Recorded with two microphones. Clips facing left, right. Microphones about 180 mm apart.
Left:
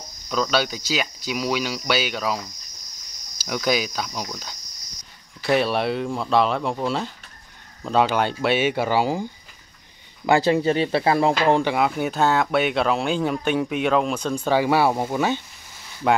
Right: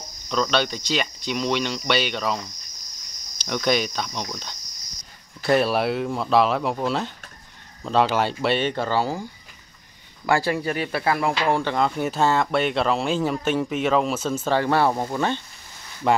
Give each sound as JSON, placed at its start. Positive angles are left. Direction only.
{"t": 0.3, "sound": "speech", "side_deg": 5}
{"t": 10.2, "sound": "speech", "side_deg": 20}
{"t": 11.7, "sound": "speech", "side_deg": 5}